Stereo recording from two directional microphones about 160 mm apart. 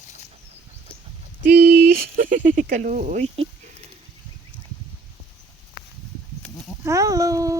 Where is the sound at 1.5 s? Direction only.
70° right (ahead or behind); by 3.4 s 50° right (ahead or behind).